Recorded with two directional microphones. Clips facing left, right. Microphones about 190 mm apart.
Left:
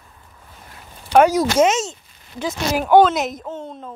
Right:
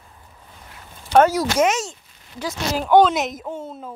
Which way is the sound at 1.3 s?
25° left (ahead or behind).